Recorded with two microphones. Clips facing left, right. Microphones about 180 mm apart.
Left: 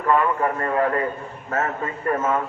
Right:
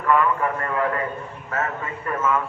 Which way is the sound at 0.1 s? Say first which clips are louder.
Even; 30° left (ahead or behind).